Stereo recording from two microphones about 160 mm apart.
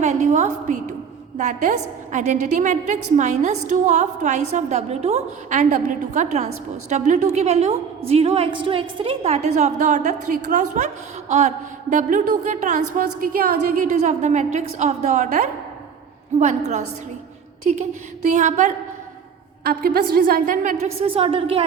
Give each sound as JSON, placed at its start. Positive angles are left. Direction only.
{"t": 0.0, "sound": "a woman's voice", "side_deg": -45}
{"t": 13.8, "sound": "a woman's voice", "side_deg": -45}
{"t": 19.6, "sound": "a woman's voice", "side_deg": -75}